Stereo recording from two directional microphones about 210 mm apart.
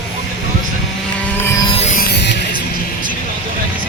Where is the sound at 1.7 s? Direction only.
30° left (ahead or behind).